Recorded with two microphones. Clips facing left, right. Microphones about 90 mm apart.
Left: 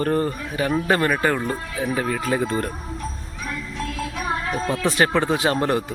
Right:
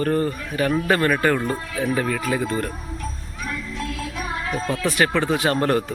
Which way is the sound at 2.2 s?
30° left (ahead or behind).